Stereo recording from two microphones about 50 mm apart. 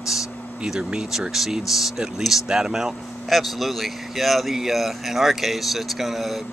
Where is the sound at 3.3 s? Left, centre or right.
Centre.